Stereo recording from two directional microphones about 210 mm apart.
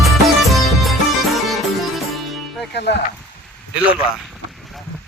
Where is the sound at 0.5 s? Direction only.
Centre (ahead or behind).